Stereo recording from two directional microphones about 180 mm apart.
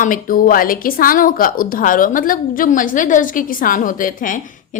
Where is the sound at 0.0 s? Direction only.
50° left (ahead or behind).